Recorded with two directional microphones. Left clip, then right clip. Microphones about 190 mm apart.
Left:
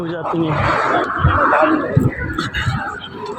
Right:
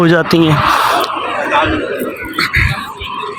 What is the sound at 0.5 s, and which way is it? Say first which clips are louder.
Speech: right 5 dB; 55° left (ahead or behind).